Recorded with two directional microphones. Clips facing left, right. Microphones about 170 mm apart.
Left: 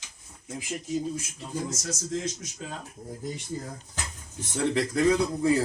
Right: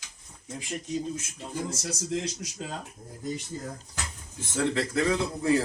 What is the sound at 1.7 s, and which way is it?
Speech, 30° right (ahead or behind).